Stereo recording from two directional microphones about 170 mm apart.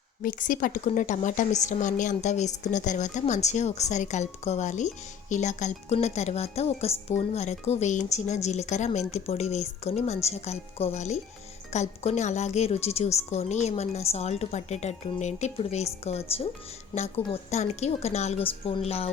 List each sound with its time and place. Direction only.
0.2 s a woman's voice: 55° left (ahead or behind); by 19.1 s 35° left (ahead or behind)